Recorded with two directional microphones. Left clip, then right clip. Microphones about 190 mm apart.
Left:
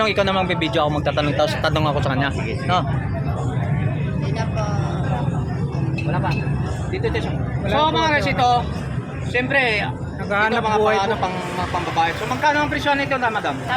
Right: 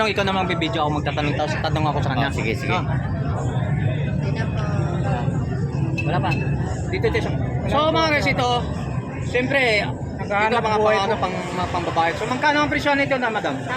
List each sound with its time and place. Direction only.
0.0 s a man's voice: 15° left (ahead or behind)
6.1 s speech: 35° right (ahead or behind)
7.8 s a man's voice: 5° right (ahead or behind)